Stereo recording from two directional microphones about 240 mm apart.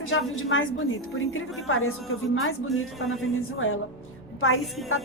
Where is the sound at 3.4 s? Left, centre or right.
Left.